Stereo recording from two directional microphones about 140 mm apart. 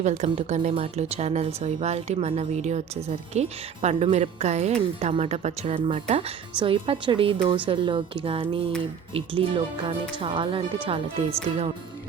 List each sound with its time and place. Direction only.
0.0 s speech: 55° right (ahead or behind)
0.7 s speech: 45° right (ahead or behind)
5.6 s speech: 40° right (ahead or behind)